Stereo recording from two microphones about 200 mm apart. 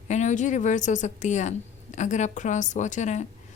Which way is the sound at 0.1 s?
35° left (ahead or behind).